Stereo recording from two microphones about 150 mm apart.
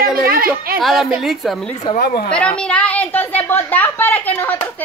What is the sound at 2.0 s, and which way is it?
Speech, 85° left.